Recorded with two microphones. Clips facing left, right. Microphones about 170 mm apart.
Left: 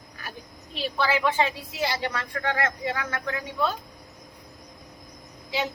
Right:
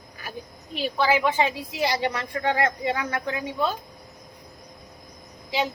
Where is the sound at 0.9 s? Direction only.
15° right (ahead or behind).